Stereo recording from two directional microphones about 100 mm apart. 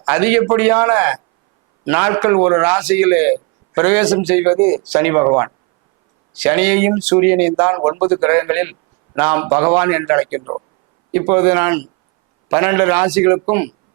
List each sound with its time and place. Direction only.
0.0 s a man's voice: 20° right (ahead or behind)